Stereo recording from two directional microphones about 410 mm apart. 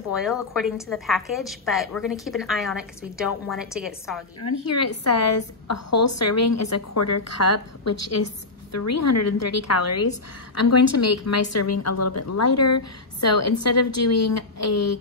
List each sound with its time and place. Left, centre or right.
0.1 s a woman's voice: centre
4.4 s a woman's voice: left